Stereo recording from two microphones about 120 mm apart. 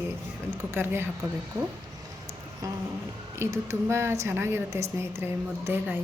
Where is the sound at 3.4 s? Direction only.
20° right (ahead or behind).